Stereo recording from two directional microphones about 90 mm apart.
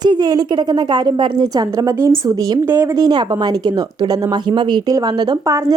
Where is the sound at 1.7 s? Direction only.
40° right (ahead or behind).